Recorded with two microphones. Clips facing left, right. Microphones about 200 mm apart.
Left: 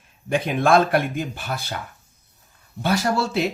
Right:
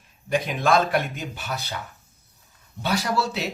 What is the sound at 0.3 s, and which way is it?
Speech, 55° left (ahead or behind).